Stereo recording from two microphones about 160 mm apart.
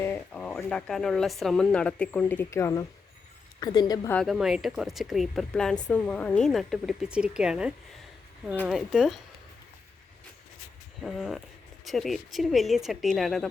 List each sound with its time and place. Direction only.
0.0 s a woman's voice: 10° left (ahead or behind)
4.1 s speech: centre (ahead or behind)
11.0 s speech: centre (ahead or behind)